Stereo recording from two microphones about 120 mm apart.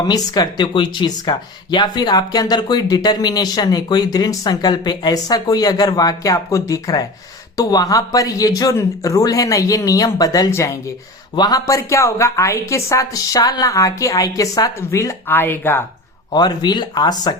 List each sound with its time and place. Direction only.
0.0 s a woman's voice: 35° left (ahead or behind); by 15.8 s 15° left (ahead or behind)
16.3 s speech: 35° left (ahead or behind)